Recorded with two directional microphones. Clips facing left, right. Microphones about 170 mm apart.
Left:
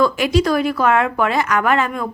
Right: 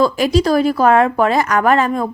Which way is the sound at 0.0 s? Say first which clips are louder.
Right 2 dB; 35° right (ahead or behind).